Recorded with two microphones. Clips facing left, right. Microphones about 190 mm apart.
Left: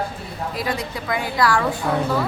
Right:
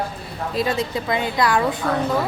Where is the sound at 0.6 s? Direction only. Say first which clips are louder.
Right 6 dB; 25° right (ahead or behind).